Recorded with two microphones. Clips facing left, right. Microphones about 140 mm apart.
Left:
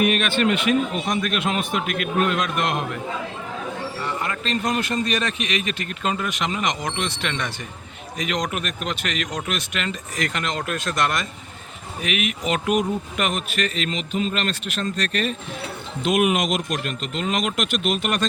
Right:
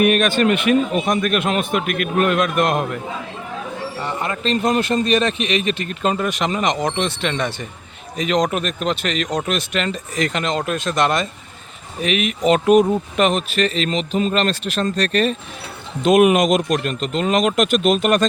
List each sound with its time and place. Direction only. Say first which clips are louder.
0.0 s a man's voice: right 5 dB; 45° right (ahead or behind)
0.4 s a man's voice: right 4 dB; 55° right (ahead or behind)
4.0 s speech: right 5 dB; 25° right (ahead or behind); by 18.3 s 40° right (ahead or behind)